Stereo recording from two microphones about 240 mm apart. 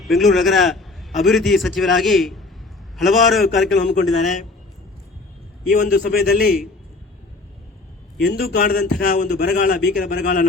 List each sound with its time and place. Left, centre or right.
0.0 s a man's voice: centre
5.7 s a man's voice: left
8.3 s a man's voice: left